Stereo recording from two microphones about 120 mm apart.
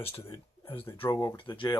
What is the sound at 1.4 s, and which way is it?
Speech, 45° left (ahead or behind).